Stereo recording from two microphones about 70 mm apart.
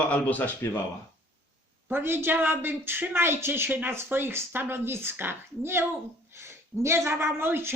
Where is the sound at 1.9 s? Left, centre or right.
Right.